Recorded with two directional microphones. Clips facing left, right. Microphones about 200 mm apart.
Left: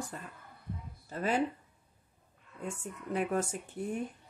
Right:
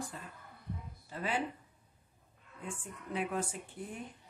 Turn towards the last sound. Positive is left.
turn(degrees=45)  # may be behind; listen again after turning